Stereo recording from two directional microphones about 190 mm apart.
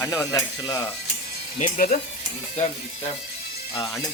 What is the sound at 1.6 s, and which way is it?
Speech, 45° left (ahead or behind).